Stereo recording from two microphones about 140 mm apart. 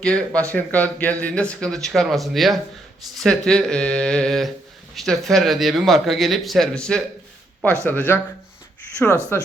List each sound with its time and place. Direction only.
0.0 s speech: 5° left (ahead or behind)
9.0 s speech: 15° right (ahead or behind)